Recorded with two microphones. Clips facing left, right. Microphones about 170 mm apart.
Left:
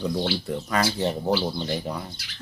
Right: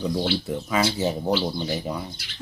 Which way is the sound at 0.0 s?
5° right (ahead or behind).